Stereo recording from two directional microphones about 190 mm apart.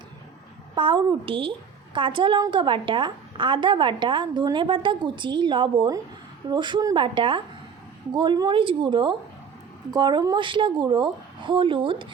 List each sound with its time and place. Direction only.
0.8 s a woman's voice: 25° right (ahead or behind)